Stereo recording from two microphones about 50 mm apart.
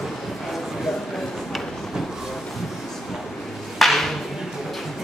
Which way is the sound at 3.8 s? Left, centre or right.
Centre.